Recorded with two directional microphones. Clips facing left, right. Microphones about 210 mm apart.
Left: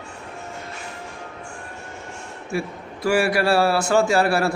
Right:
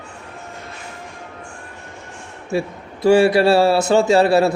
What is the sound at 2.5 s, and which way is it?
A man's voice, 25° right (ahead or behind).